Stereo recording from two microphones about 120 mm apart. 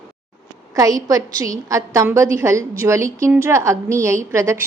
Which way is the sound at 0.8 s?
30° right (ahead or behind).